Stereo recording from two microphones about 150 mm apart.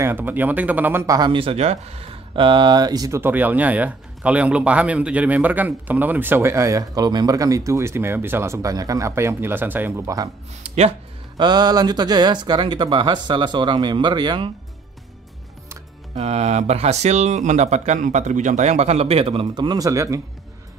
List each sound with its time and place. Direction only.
0.0 s speech: 15° right (ahead or behind)
1.0 s speech: 25° right (ahead or behind)
10.6 s speech: 45° right (ahead or behind)
11.3 s speech: 30° right (ahead or behind)
16.2 s speech: 45° right (ahead or behind); by 20.2 s 20° right (ahead or behind)